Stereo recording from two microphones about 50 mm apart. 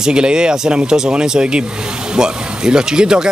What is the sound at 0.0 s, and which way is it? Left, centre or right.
Speech, centre.